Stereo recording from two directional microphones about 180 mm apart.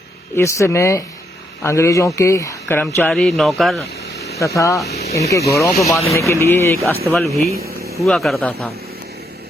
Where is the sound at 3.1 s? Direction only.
Centre (ahead or behind).